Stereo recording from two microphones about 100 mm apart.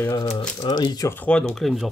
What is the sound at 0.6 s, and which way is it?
Speech, 45° left (ahead or behind).